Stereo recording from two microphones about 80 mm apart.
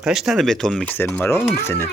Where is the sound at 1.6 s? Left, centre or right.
Left.